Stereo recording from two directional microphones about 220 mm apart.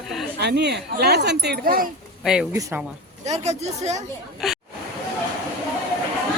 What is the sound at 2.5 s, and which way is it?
Speech, 15° right (ahead or behind).